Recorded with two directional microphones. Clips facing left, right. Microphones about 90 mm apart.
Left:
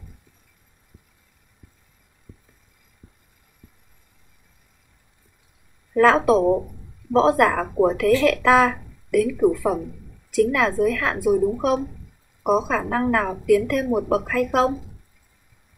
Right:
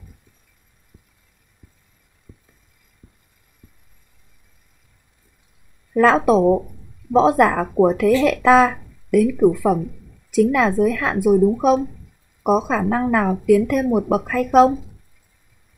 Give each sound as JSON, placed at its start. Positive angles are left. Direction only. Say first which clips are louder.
{"t": 5.9, "sound": "a woman's voice", "louder": "right 1 dB", "side_deg": -5}
{"t": 12.4, "sound": "a woman's voice", "louder": "right 3 dB", "side_deg": -15}